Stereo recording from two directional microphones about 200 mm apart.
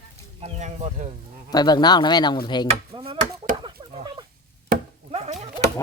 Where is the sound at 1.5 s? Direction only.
20° left (ahead or behind).